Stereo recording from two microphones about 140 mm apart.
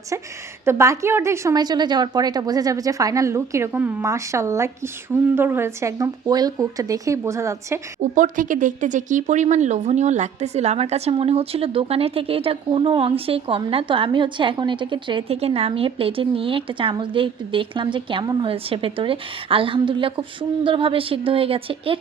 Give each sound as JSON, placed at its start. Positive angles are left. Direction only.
{"t": 0.6, "sound": "a woman's voice", "side_deg": -20}
{"t": 8.0, "sound": "speech", "side_deg": -65}